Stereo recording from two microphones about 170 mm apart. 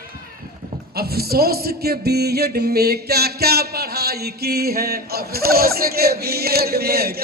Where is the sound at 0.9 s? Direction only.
65° right (ahead or behind).